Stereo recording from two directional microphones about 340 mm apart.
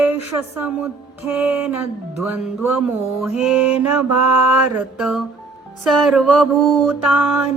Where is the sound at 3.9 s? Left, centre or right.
Right.